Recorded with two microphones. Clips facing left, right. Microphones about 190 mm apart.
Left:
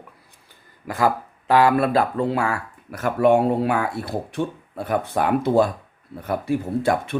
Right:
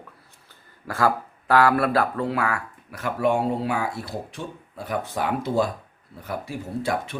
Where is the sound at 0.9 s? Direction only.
20° left (ahead or behind).